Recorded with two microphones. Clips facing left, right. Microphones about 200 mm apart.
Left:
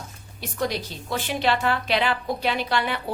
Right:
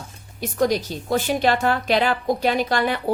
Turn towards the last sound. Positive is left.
turn(degrees=-45)  # may be behind; listen again after turning